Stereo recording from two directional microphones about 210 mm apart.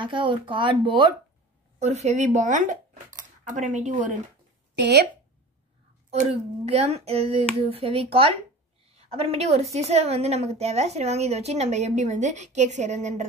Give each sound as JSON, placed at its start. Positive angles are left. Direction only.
{"t": 0.0, "sound": "a child's voice", "side_deg": -25}
{"t": 4.7, "sound": "a woman's voice", "side_deg": -55}
{"t": 6.0, "sound": "a child's voice", "side_deg": -30}